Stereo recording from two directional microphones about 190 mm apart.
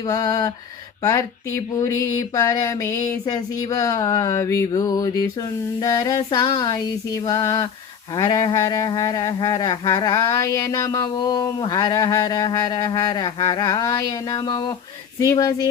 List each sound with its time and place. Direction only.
0.0 s speech: 20° left (ahead or behind)